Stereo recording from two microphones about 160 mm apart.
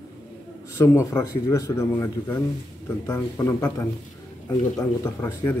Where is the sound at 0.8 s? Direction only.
15° left (ahead or behind).